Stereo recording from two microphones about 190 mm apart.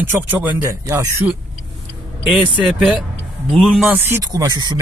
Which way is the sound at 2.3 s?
5° right (ahead or behind).